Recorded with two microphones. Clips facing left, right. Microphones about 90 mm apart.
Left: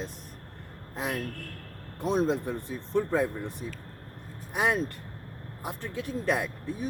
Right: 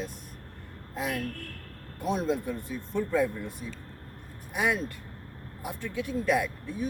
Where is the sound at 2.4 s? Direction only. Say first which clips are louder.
Even; 30° left (ahead or behind).